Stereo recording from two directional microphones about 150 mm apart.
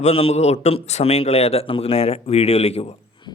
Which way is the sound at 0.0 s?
40° left (ahead or behind).